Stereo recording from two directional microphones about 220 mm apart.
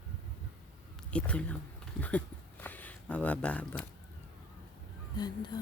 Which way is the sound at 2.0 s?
5° left (ahead or behind).